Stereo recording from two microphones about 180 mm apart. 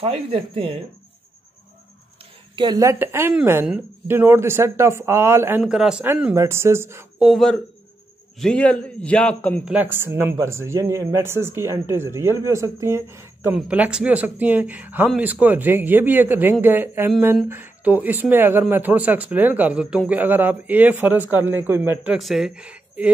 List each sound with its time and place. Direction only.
0.0 s speech: 30° right (ahead or behind)
2.5 s speech: 20° right (ahead or behind)
5.6 s a man's voice: 5° right (ahead or behind)
7.2 s a man's voice: centre (ahead or behind)
9.7 s speech: 10° right (ahead or behind)